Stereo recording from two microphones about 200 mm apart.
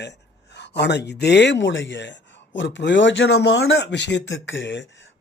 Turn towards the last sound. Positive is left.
turn(degrees=65)  # may be behind; listen again after turning